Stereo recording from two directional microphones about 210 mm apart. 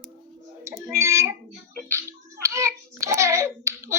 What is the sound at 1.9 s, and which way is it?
Hands, 15° right (ahead or behind).